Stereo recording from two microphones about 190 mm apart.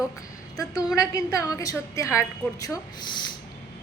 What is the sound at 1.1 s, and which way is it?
A woman's voice, 20° left (ahead or behind).